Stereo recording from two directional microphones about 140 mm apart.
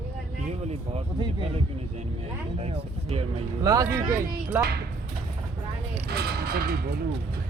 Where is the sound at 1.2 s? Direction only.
40° right (ahead or behind).